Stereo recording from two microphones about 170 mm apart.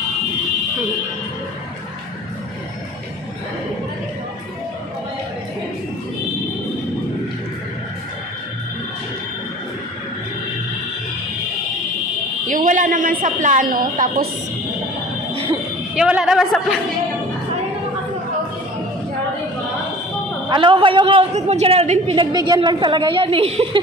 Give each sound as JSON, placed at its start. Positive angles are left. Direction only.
{"t": 12.4, "sound": "a sound", "side_deg": -50}
{"t": 15.4, "sound": "a woman's voice", "side_deg": -5}
{"t": 20.4, "sound": "a man's voice", "side_deg": -30}